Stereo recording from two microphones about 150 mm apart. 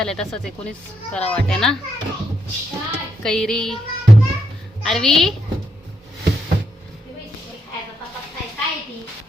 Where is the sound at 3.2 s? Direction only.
5° left (ahead or behind).